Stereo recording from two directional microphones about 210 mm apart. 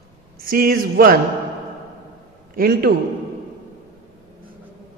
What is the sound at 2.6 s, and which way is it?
Mantra, 45° right (ahead or behind).